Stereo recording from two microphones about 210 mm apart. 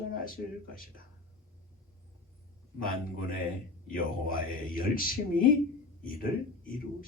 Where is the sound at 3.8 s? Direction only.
40° left (ahead or behind).